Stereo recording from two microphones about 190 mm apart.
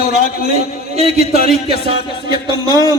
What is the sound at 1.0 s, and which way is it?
Speech, 35° right (ahead or behind).